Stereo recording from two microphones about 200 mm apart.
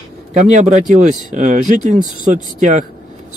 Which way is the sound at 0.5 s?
35° right (ahead or behind).